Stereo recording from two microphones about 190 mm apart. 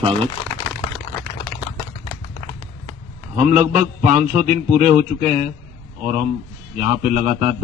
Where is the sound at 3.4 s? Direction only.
40° right (ahead or behind).